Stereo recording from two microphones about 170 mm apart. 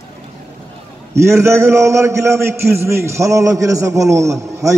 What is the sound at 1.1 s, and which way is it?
A man's voice, 15° right (ahead or behind).